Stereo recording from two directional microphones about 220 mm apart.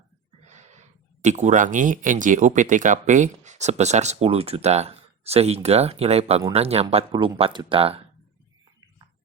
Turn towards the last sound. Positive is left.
turn(degrees=-25)  # may be behind; listen again after turning